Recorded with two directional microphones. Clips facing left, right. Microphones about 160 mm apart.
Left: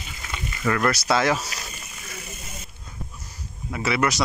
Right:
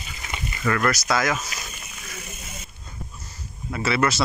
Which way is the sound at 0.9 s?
30° left (ahead or behind).